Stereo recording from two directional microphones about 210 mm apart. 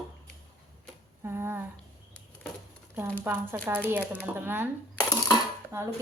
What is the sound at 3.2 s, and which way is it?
Speech, 10° right (ahead or behind).